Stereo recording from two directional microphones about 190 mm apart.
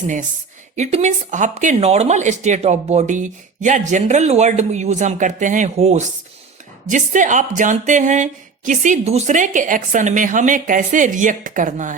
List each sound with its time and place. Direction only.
0.8 s speech: 35° right (ahead or behind)